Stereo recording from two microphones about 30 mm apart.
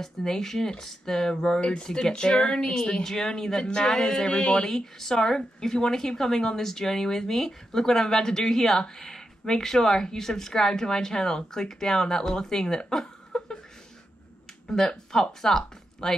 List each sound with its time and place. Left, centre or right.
0.0 s speech: centre
14.7 s speech: left
15.1 s speech: centre